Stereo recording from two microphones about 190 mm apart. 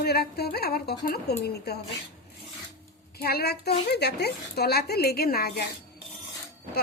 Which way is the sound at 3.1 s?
55° left (ahead or behind).